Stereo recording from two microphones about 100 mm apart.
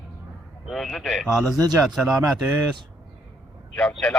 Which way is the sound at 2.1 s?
35° right (ahead or behind).